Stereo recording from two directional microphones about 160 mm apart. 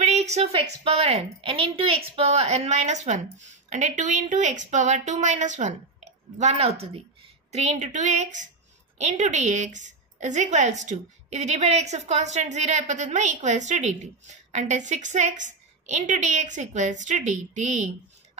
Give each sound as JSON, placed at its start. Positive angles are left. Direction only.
{"t": 0.0, "sound": "a woman's voice", "side_deg": -45}